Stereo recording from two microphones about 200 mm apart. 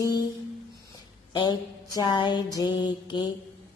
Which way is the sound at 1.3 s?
20° left (ahead or behind).